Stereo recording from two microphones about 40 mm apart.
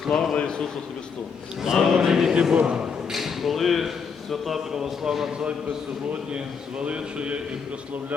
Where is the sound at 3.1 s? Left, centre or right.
Centre.